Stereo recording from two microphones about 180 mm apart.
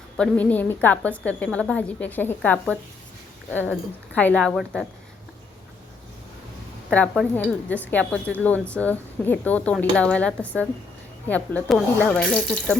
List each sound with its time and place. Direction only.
0.2 s a woman's voice: 10° left (ahead or behind)
6.9 s a woman's voice: 5° left (ahead or behind)